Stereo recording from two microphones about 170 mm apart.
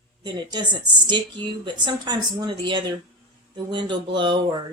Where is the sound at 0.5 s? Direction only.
25° right (ahead or behind).